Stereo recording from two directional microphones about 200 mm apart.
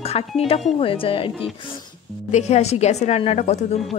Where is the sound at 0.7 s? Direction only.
25° left (ahead or behind).